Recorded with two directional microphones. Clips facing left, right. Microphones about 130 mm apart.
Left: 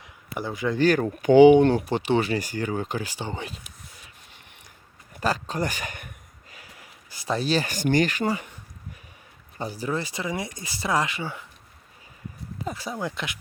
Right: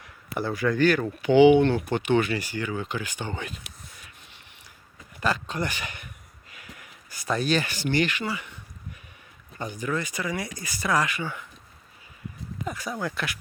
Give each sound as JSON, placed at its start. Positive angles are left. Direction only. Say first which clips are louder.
{"t": 0.3, "sound": "speech", "louder": "right 2 dB", "side_deg": 20}
{"t": 0.8, "sound": "speech", "louder": "left 4 dB", "side_deg": 40}
{"t": 5.2, "sound": "speech", "louder": "left 1 dB", "side_deg": 40}
{"t": 6.5, "sound": "speech", "louder": "right 2 dB", "side_deg": 35}
{"t": 9.6, "sound": "speech", "louder": "left 1 dB", "side_deg": 35}
{"t": 12.5, "sound": "speech", "louder": "left 1 dB", "side_deg": 30}